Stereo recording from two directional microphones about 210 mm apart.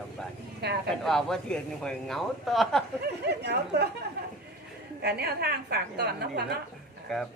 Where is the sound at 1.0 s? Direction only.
Centre (ahead or behind).